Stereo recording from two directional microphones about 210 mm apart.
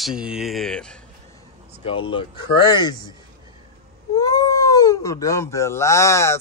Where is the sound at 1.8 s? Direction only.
25° left (ahead or behind).